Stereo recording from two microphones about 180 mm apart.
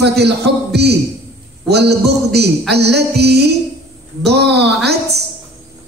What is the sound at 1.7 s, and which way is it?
A man's voice, 65° right (ahead or behind).